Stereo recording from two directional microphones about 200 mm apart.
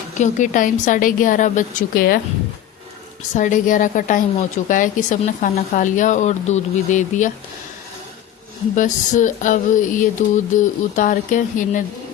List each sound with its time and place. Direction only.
0.2 s a woman's voice: 40° left (ahead or behind)
3.3 s a woman's voice: 40° left (ahead or behind)
8.7 s a woman's voice: 40° left (ahead or behind)